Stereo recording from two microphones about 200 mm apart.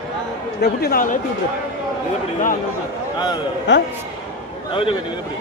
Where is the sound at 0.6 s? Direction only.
50° left (ahead or behind).